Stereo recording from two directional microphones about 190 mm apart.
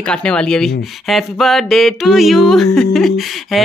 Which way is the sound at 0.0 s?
5° left (ahead or behind).